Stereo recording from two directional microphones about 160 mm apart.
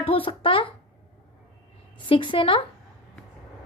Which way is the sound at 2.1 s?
30° left (ahead or behind).